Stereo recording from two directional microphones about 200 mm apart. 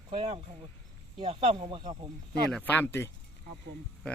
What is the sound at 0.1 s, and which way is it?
Speech, 30° right (ahead or behind).